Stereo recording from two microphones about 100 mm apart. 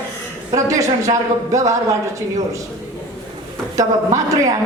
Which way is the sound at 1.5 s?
35° right (ahead or behind).